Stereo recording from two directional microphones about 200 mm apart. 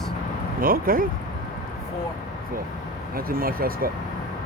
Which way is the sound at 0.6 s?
45° right (ahead or behind).